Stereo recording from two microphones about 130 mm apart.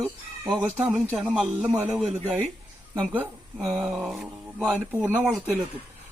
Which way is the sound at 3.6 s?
5° right (ahead or behind).